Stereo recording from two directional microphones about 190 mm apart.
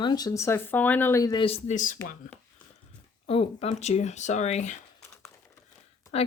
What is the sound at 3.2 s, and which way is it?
Speech, 30° left (ahead or behind).